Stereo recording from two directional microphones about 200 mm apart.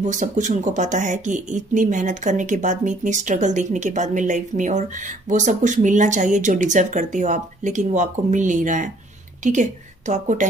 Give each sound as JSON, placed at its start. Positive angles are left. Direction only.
{"t": 0.0, "sound": "a woman's voice", "side_deg": -35}